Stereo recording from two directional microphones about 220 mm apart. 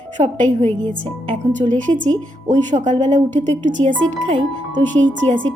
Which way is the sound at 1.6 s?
20° right (ahead or behind).